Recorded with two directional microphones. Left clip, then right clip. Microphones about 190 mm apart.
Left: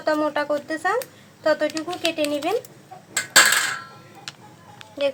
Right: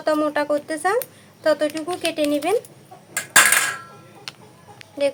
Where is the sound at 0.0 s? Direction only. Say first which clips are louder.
Right 2 dB; 20° right (ahead or behind).